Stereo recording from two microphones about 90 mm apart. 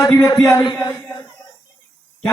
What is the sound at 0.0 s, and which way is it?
A man's voice, 35° left (ahead or behind).